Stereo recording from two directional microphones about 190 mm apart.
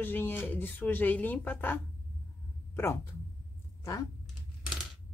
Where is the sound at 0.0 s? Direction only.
10° left (ahead or behind).